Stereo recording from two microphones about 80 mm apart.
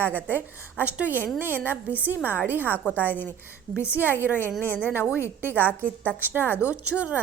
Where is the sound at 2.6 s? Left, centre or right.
Left.